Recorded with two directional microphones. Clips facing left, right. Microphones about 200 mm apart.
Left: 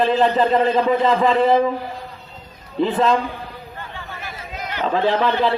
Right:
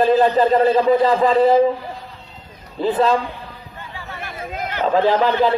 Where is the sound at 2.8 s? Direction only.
35° right (ahead or behind).